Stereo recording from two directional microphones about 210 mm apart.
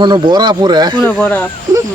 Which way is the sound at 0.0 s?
20° right (ahead or behind).